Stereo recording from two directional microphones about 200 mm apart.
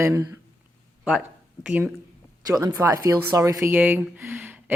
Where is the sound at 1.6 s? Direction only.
5° right (ahead or behind).